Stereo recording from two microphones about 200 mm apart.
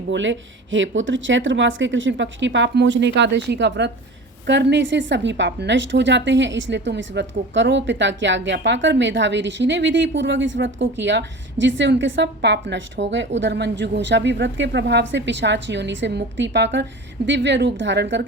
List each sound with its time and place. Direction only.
0.1 s a woman's voice: 70° right (ahead or behind)